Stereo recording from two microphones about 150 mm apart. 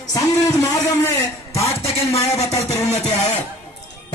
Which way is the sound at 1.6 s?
45° left (ahead or behind).